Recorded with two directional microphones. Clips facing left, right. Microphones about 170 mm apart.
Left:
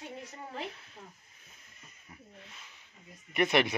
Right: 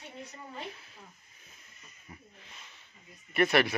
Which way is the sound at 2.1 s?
Centre (ahead or behind).